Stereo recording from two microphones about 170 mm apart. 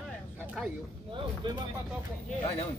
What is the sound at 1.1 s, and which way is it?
Speech, 25° right (ahead or behind).